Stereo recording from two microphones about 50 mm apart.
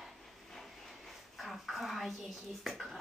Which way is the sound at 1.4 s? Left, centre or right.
Centre.